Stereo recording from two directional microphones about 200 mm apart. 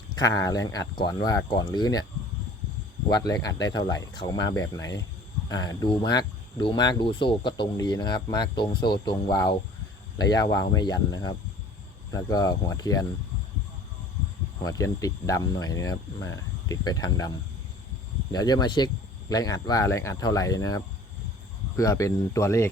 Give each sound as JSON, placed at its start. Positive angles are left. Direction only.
{"t": 0.2, "sound": "speech", "side_deg": 15}
{"t": 3.1, "sound": "speech", "side_deg": 20}
{"t": 14.6, "sound": "speech", "side_deg": 15}